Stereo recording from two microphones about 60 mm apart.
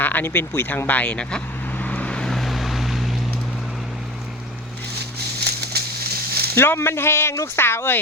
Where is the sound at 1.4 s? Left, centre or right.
Left.